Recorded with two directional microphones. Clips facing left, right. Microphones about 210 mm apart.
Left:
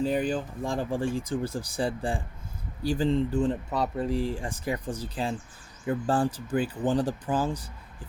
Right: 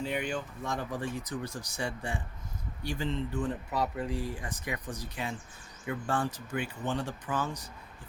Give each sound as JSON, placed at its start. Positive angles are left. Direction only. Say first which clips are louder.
{"t": 0.0, "sound": "speech", "louder": "left 7 dB", "side_deg": 35}